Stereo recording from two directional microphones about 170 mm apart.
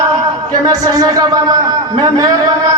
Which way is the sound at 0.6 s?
20° right (ahead or behind).